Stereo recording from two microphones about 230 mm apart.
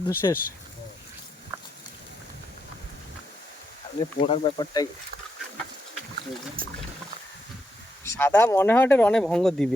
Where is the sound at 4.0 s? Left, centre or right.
Left.